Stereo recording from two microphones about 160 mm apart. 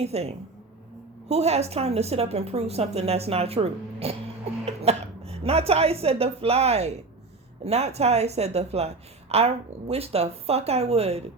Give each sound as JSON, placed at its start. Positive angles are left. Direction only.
{"t": 0.0, "sound": "a woman's voice", "side_deg": -40}